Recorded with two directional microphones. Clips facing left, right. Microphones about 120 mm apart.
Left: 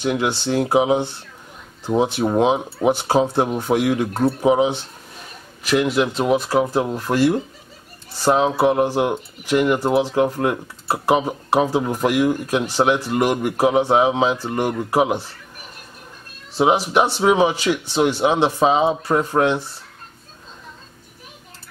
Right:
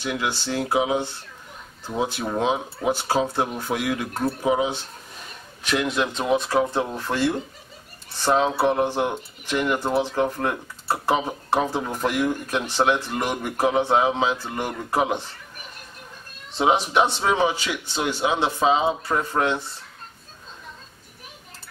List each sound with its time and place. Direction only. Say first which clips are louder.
0.7 s speech: left 5 dB; 20° left (ahead or behind)
5.6 s speech: left 5 dB; 5° left (ahead or behind)
16.5 s speech: left 3 dB; 5° left (ahead or behind)